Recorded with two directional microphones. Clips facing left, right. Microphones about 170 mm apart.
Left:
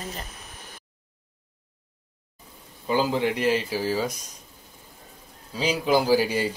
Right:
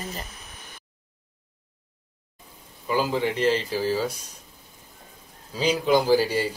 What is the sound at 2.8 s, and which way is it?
Speech, 20° left (ahead or behind).